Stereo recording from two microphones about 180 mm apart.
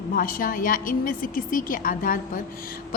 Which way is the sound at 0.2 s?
50° left (ahead or behind).